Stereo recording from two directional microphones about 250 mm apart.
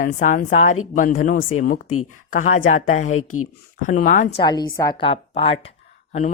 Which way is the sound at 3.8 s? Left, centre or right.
Left.